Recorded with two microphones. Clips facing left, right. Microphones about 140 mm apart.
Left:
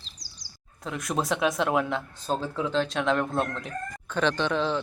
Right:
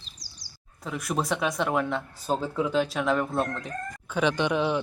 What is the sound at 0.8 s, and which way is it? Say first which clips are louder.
Speech: even; centre (ahead or behind).